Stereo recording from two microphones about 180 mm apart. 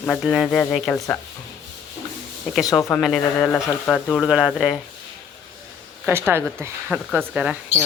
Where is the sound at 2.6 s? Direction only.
20° left (ahead or behind).